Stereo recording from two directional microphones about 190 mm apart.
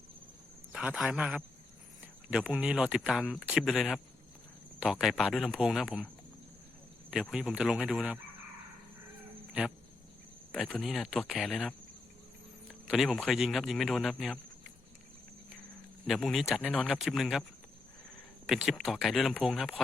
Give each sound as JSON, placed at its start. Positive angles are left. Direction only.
{"t": 0.7, "sound": "a man's voice", "side_deg": -5}
{"t": 7.1, "sound": "speech", "side_deg": -5}
{"t": 10.5, "sound": "speech", "side_deg": 0}
{"t": 12.9, "sound": "speech", "side_deg": 0}
{"t": 16.0, "sound": "speech", "side_deg": 0}
{"t": 18.4, "sound": "speech", "side_deg": 0}